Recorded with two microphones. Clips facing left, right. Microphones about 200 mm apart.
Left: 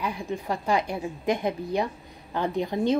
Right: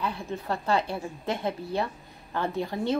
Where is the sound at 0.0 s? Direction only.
15° left (ahead or behind).